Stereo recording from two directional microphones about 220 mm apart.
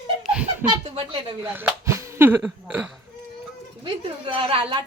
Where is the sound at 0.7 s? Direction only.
20° right (ahead or behind).